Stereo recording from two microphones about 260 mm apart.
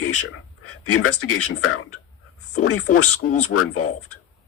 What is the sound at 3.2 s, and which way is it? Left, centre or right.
Speech, left.